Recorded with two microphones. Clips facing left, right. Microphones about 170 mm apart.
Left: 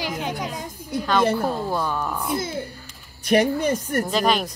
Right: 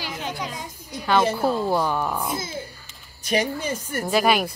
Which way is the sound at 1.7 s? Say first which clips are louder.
Right 2 dB; 15° right (ahead or behind).